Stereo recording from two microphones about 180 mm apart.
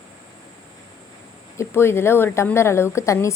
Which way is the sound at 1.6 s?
15° left (ahead or behind).